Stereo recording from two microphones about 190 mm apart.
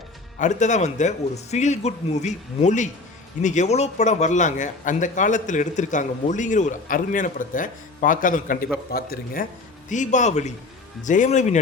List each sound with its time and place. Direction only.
0.3 s a man's voice: 40° left (ahead or behind)